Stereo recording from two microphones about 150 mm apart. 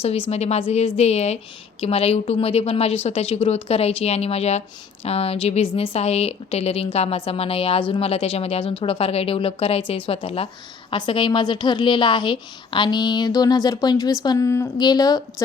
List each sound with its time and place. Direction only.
0.0 s a woman's voice: 40° left (ahead or behind); by 15.4 s 25° left (ahead or behind)